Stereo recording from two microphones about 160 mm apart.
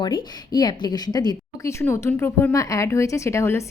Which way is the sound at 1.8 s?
15° left (ahead or behind).